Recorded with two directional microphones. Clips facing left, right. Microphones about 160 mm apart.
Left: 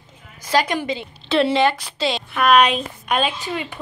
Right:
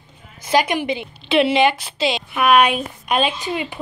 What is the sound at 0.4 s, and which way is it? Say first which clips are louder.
A woman's voice: right 2 dB; 15° right (ahead or behind).